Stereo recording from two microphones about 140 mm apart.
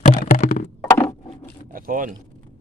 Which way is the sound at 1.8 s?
75° right (ahead or behind).